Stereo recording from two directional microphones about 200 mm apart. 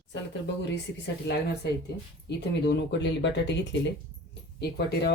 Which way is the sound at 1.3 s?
55° left (ahead or behind).